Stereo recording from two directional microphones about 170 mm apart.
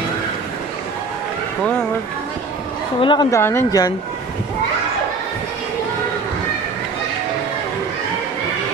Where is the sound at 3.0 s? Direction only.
25° left (ahead or behind).